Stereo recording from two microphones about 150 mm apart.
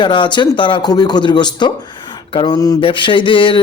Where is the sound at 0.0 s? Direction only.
30° left (ahead or behind).